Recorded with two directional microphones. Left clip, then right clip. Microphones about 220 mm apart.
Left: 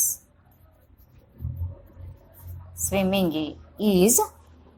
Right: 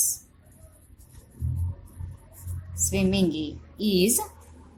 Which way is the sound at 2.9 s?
15° left (ahead or behind).